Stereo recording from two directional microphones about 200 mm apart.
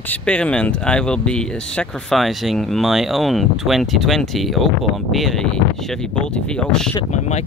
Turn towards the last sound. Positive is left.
turn(degrees=35)  # may be behind; listen again after turning